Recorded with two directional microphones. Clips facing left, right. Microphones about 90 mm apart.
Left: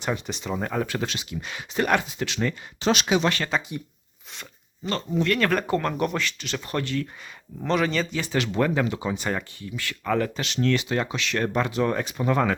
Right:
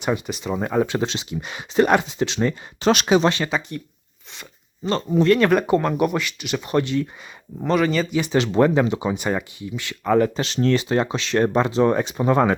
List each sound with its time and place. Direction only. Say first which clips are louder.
0.0 s speech: right 5 dB; 5° right (ahead or behind)
0.9 s speech: right 5 dB; 25° right (ahead or behind)
2.8 s speech: right 5 dB; 50° right (ahead or behind)
3.2 s speech: right 5 dB; 20° right (ahead or behind)
5.2 s speech: right 7 dB; 25° right (ahead or behind)
5.5 s speech: right 6 dB; 15° right (ahead or behind)
7.7 s speech: right 4 dB; 5° right (ahead or behind)
8.2 s speech: right 8 dB; 25° right (ahead or behind)
10.4 s speech: right 4 dB; 35° right (ahead or behind)